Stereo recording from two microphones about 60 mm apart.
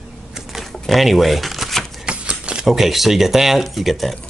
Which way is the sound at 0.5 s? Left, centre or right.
Centre.